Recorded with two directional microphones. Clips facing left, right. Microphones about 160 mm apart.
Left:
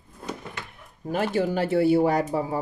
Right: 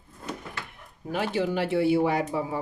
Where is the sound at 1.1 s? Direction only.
45° left (ahead or behind).